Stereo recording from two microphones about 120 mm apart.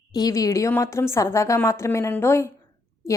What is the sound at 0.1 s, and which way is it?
A woman's voice, 30° left (ahead or behind).